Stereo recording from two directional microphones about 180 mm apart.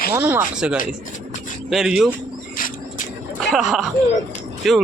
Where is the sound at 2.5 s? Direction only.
50° left (ahead or behind).